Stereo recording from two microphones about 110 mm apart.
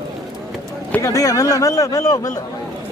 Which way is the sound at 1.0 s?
30° left (ahead or behind).